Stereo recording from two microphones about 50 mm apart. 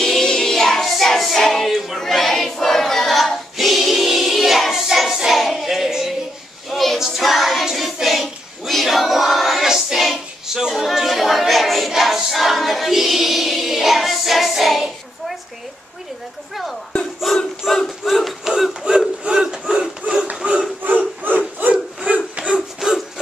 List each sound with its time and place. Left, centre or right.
0.0 s music: centre
2.0 s choir: centre
6.7 s a sound: centre
7.0 s child singing: centre
17.2 s battle cry: centre
19.6 s a sound: centre
21.6 s bow-wow: right
22.0 s a sound: right
22.8 s rub: centre